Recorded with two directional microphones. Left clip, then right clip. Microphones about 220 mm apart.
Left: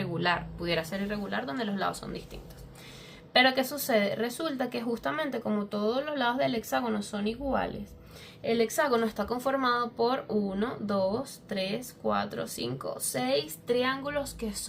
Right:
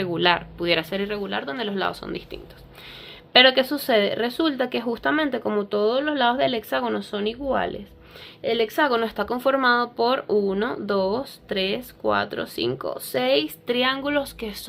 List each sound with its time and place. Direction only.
0.0 s speech: 35° right (ahead or behind)
3.3 s speech: 40° right (ahead or behind)